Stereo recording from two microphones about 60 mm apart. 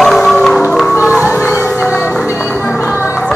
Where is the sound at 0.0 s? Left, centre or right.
Centre.